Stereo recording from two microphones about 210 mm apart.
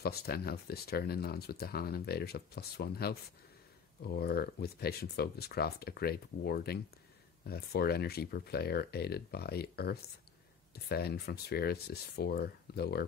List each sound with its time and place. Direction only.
0.0 s speech: 45° left (ahead or behind)